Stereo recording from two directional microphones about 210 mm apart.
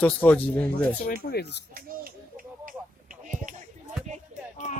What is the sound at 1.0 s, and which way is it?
Speech, 50° left (ahead or behind).